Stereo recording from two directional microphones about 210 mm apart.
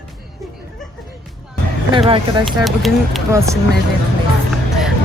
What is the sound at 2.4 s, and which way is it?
Speech, centre (ahead or behind).